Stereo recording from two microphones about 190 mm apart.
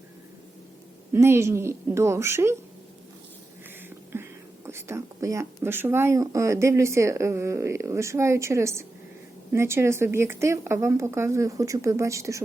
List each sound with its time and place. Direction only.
1.1 s speech: 15° right (ahead or behind)
3.8 s speech: 10° right (ahead or behind)